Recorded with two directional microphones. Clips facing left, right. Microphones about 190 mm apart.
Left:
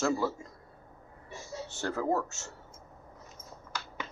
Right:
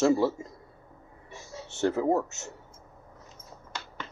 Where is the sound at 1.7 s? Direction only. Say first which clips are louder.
Right 6 dB; 25° right (ahead or behind).